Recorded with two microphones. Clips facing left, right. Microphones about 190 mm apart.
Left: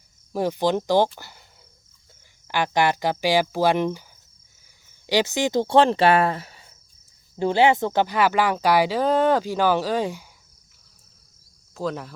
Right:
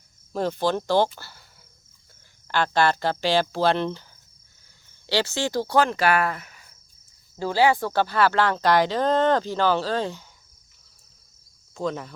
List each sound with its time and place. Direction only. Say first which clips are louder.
0.3 s speech: left 2 dB; 15° left (ahead or behind)
2.5 s speech: even; 15° left (ahead or behind)
5.0 s speech: left 3 dB; 15° left (ahead or behind)
11.7 s speech: even; 5° left (ahead or behind)